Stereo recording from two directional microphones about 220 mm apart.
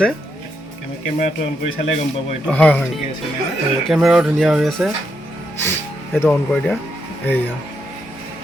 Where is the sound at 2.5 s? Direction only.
5° left (ahead or behind).